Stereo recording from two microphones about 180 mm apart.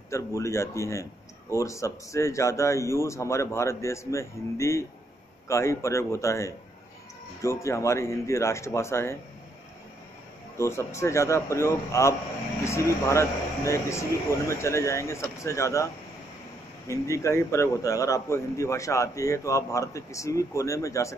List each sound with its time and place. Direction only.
0.1 s a man's voice: 15° left (ahead or behind)
10.6 s a man's voice: 15° left (ahead or behind)